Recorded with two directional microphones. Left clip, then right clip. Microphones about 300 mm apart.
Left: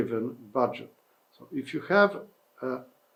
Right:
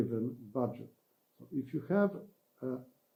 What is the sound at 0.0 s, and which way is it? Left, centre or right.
Speech, centre.